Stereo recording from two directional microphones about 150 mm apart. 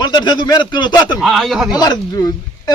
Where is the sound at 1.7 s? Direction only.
25° left (ahead or behind).